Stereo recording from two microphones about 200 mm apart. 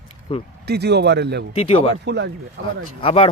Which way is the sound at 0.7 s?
55° right (ahead or behind).